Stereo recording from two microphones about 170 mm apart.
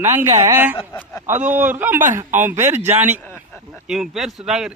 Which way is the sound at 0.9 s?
15° left (ahead or behind).